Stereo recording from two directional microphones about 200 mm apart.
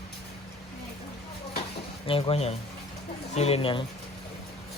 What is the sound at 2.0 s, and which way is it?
Speech, 25° left (ahead or behind).